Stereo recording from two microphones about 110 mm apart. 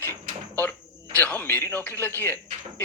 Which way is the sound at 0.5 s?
15° left (ahead or behind).